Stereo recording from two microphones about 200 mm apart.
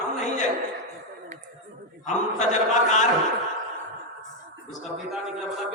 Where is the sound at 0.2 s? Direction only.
35° left (ahead or behind).